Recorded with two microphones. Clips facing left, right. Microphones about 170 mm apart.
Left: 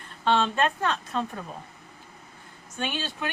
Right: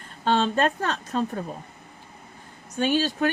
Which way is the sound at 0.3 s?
45° right (ahead or behind).